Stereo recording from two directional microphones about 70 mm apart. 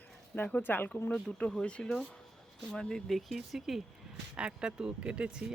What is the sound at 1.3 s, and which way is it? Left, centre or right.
Speech, centre.